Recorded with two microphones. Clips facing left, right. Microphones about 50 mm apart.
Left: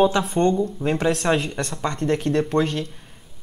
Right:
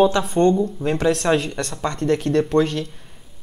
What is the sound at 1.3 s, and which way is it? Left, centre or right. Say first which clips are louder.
Speech: right 2 dB; left.